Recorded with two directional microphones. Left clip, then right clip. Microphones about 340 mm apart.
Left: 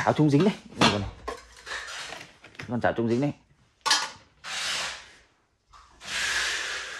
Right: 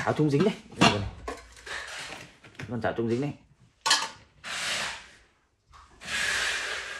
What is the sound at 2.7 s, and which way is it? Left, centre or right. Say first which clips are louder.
Speech: left 3 dB; left.